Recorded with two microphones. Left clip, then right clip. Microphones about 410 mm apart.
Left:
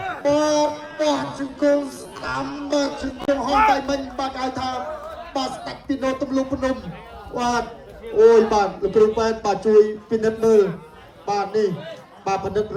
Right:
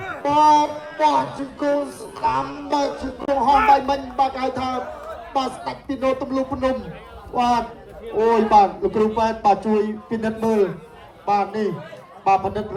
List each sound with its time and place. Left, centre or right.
0.2 s a man's voice: centre